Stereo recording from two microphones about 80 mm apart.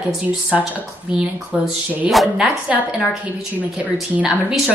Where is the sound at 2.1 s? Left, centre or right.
Centre.